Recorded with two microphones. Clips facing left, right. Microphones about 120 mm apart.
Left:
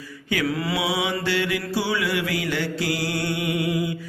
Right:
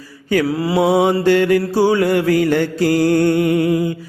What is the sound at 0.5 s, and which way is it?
Mantra, 30° right (ahead or behind).